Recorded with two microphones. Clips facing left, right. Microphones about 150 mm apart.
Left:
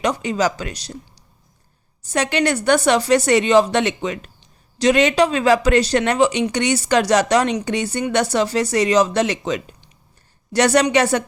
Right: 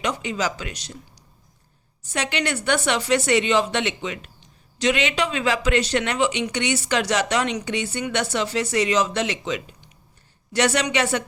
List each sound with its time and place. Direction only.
0.0 s speech: 40° left (ahead or behind)
2.0 s speech: 40° left (ahead or behind)